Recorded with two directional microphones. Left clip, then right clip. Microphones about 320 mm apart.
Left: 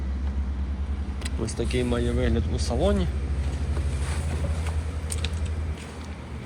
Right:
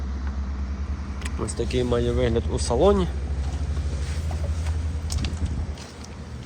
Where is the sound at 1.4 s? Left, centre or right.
Centre.